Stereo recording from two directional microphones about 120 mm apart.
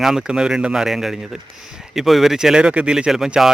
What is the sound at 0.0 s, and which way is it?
Speech, 5° right (ahead or behind).